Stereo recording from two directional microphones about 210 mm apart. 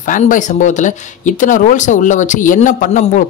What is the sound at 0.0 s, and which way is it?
Speech, 40° left (ahead or behind).